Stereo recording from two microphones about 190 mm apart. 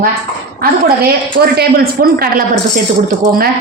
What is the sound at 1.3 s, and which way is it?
A woman's voice, 55° right (ahead or behind).